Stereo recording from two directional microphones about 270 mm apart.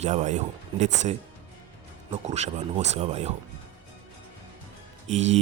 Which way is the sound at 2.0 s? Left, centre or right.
Right.